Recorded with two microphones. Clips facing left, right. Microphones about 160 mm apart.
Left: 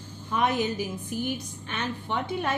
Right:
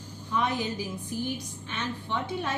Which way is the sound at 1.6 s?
60° left (ahead or behind).